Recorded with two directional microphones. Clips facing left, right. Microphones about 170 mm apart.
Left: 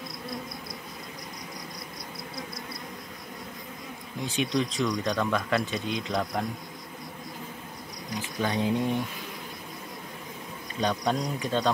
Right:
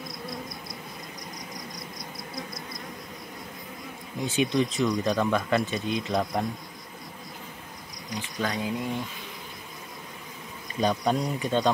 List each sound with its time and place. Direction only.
4.2 s speech: 5° right (ahead or behind)
8.4 s speech: 20° left (ahead or behind)
10.8 s speech: 5° right (ahead or behind)